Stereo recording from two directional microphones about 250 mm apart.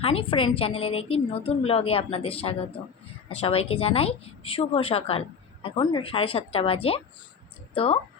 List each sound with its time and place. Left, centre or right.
0.0 s a woman's voice: left